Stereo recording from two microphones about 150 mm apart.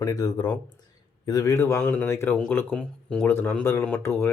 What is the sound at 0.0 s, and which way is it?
Speech, 25° left (ahead or behind).